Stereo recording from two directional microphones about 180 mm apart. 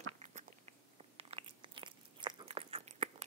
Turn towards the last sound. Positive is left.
turn(degrees=-35)  # may be behind; listen again after turning